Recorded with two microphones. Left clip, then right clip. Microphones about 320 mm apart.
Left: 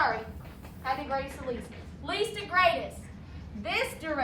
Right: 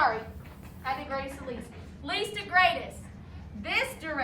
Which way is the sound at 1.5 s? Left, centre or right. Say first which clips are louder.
Left 3 dB; centre.